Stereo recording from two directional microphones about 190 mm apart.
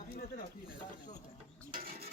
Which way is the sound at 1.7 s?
50° right (ahead or behind).